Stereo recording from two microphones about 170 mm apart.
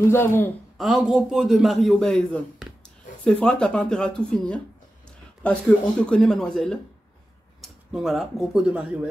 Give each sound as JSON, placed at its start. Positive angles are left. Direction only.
{"t": 0.1, "sound": "speech", "side_deg": 15}
{"t": 0.7, "sound": "a man's voice", "side_deg": 0}